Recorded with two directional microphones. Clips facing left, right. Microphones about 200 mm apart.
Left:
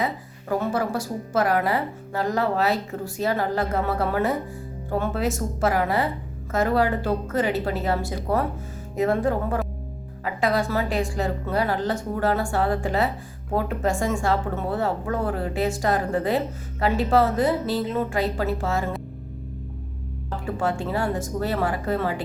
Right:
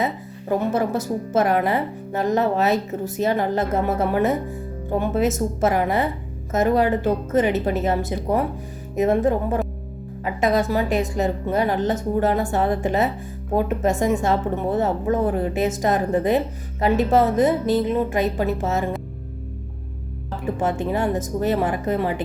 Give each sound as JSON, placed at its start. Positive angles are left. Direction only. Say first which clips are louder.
{"t": 0.0, "sound": "speech", "louder": "right 3 dB", "side_deg": -20}
{"t": 20.6, "sound": "speech", "louder": "right 3 dB", "side_deg": -20}